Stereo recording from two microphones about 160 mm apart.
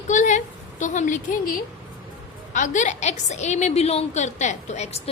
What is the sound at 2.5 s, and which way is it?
A woman's voice, 50° left (ahead or behind).